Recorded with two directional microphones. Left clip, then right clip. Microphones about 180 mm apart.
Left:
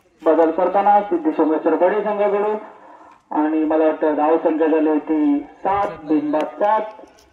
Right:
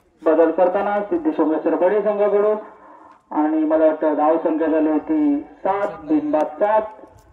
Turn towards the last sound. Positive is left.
turn(degrees=45)  # may be behind; listen again after turning